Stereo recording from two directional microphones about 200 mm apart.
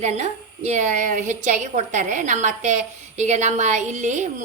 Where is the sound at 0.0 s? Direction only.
35° right (ahead or behind).